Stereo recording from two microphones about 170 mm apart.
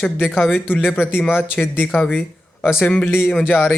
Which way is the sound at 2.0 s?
5° left (ahead or behind).